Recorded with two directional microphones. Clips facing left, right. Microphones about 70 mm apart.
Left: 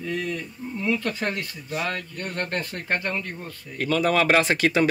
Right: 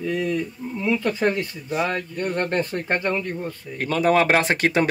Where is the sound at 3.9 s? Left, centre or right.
Right.